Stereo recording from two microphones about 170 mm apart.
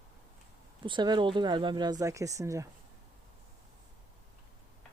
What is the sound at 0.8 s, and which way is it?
Speech, 25° right (ahead or behind).